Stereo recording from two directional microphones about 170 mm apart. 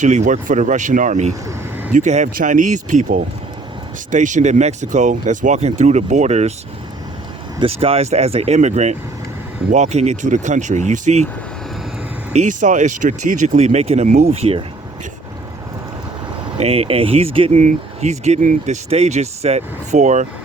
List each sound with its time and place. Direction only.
0.0 s speech: 45° right (ahead or behind)
1.3 s speech: 20° right (ahead or behind)
1.9 s speech: 45° right (ahead or behind)
4.1 s speech: 45° right (ahead or behind)
7.6 s speech: 35° right (ahead or behind)
12.3 s speech: 45° right (ahead or behind)
16.6 s speech: 40° right (ahead or behind)
17.6 s speech: 45° right (ahead or behind)